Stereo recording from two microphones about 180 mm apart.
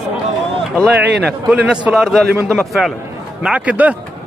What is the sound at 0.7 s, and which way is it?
A man's voice, 5° right (ahead or behind).